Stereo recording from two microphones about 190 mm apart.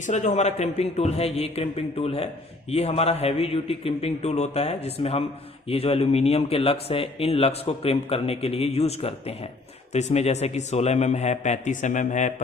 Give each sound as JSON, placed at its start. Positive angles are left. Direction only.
{"t": 0.0, "sound": "speech", "side_deg": 40}